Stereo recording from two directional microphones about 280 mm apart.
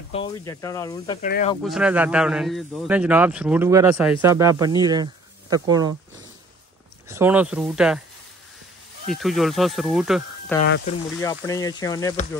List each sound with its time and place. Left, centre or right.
0.1 s speech: centre
1.2 s speech: left
1.6 s a man's voice: centre
7.1 s a man's voice: centre
9.0 s a man's voice: centre